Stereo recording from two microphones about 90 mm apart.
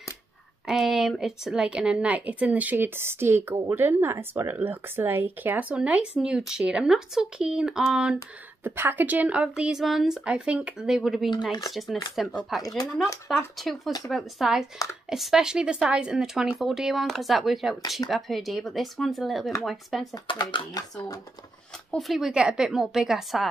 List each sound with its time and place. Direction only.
0.7 s speech: centre (ahead or behind)
8.6 s speech: 25° right (ahead or behind); by 20.2 s centre (ahead or behind)
20.7 s speech: 45° left (ahead or behind)
21.9 s speech: centre (ahead or behind)